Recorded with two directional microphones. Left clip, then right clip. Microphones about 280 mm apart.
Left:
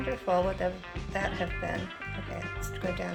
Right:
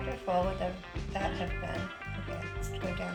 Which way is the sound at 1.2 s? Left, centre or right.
Centre.